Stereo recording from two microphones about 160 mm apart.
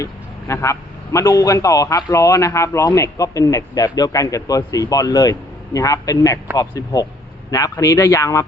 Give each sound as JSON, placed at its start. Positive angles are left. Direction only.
{"t": 0.0, "sound": "a man's voice", "side_deg": 20}